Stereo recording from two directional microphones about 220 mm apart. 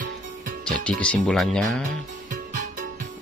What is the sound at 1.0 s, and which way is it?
Speech, 5° left (ahead or behind).